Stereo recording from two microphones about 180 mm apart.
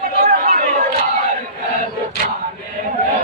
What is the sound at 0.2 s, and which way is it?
Chatter, 55° right (ahead or behind).